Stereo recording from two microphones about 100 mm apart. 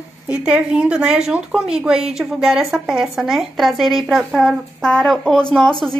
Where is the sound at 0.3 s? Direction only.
10° right (ahead or behind).